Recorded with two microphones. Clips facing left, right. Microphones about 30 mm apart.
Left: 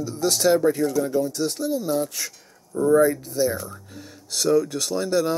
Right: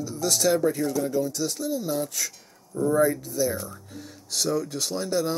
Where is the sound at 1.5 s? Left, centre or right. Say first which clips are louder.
Left 4 dB; left.